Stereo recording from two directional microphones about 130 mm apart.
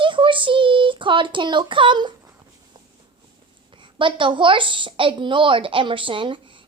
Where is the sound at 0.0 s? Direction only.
40° right (ahead or behind).